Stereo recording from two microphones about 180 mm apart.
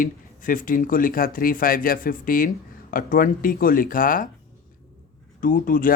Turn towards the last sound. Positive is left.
turn(degrees=50)  # may be behind; listen again after turning